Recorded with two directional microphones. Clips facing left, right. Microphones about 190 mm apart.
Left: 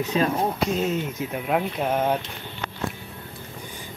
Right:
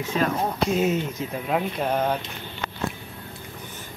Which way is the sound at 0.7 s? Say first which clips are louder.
Right 2 dB; 5° right (ahead or behind).